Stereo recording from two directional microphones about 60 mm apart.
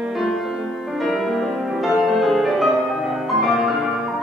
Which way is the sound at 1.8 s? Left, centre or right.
Centre.